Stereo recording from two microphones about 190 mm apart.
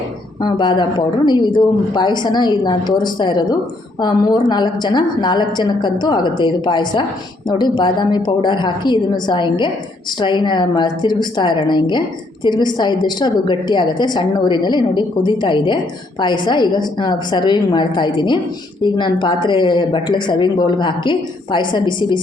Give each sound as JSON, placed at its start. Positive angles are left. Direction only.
{"t": 0.4, "sound": "a woman's voice", "side_deg": 25}